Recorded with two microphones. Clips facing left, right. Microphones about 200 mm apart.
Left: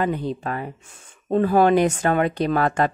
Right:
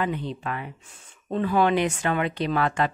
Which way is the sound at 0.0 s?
40° left (ahead or behind).